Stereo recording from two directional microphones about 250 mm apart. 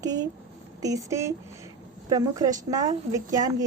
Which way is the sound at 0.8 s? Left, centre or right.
Centre.